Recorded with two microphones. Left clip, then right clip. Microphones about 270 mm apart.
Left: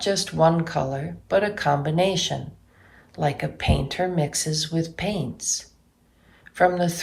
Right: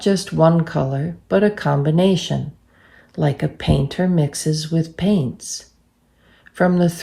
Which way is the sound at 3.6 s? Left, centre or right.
Right.